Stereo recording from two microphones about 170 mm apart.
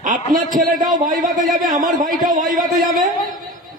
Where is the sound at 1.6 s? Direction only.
55° right (ahead or behind).